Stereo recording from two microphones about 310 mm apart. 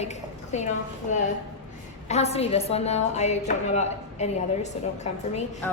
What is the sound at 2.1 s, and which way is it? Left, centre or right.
A woman's voice, centre.